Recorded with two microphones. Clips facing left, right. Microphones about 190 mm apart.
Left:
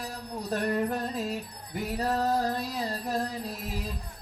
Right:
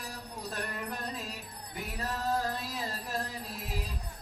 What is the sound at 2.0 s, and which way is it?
Music, 40° left (ahead or behind).